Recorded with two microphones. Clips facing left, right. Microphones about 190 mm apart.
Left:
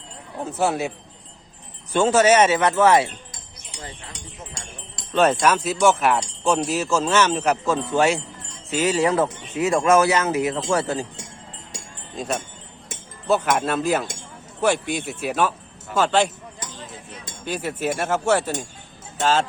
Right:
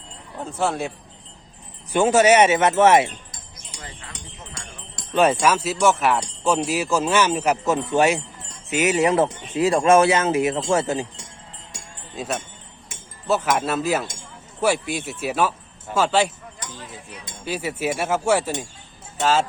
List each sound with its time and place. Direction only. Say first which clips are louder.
0.5 s speech: left 1 dB; 5° left (ahead or behind)
1.9 s speech: right 1 dB; 15° right (ahead or behind)
5.1 s speech: even; 10° right (ahead or behind)
12.1 s speech: left 1 dB; 5° right (ahead or behind)
17.4 s speech: even; 5° right (ahead or behind)